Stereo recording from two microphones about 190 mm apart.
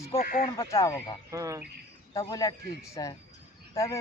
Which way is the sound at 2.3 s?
20° left (ahead or behind).